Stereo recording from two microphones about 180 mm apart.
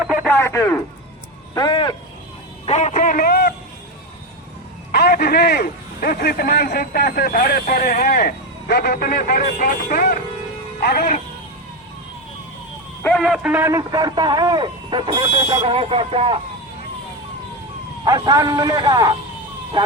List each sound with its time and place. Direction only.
0.0 s radio: 5° right (ahead or behind)
0.3 s speech: 10° left (ahead or behind)
1.5 s speech: 25° left (ahead or behind)
2.6 s speech: 40° left (ahead or behind); by 3.5 s 55° left (ahead or behind)
4.9 s a man's voice: 60° left (ahead or behind)
13.0 s a man's voice: 5° left (ahead or behind); by 16.4 s 30° right (ahead or behind)
18.0 s a man's voice: 20° right (ahead or behind)